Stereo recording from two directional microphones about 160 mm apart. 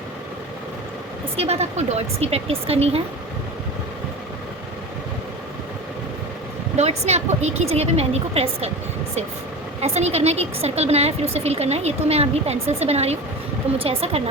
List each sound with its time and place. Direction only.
1.4 s a woman's voice: 40° right (ahead or behind)
6.7 s a woman's voice: 40° right (ahead or behind)
9.8 s a woman's voice: 40° right (ahead or behind)